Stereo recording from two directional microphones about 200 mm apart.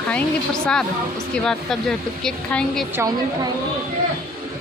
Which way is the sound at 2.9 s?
15° right (ahead or behind).